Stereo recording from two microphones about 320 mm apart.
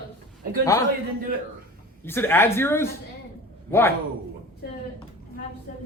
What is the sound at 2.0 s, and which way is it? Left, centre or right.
Speech, centre.